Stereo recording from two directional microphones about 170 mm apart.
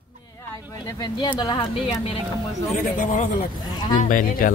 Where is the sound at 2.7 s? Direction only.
50° left (ahead or behind).